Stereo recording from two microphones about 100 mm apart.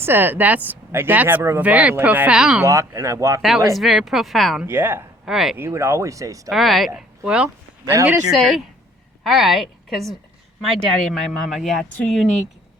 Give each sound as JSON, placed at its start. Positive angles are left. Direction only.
{"t": 0.0, "sound": "speech", "side_deg": -20}
{"t": 2.6, "sound": "speech", "side_deg": -30}
{"t": 3.8, "sound": "speech", "side_deg": 0}
{"t": 4.6, "sound": "speech", "side_deg": -20}
{"t": 5.2, "sound": "speech", "side_deg": -5}
{"t": 5.5, "sound": "speech", "side_deg": -25}
{"t": 6.5, "sound": "speech", "side_deg": 0}
{"t": 7.3, "sound": "speech", "side_deg": -10}
{"t": 8.3, "sound": "a woman's voice", "side_deg": 0}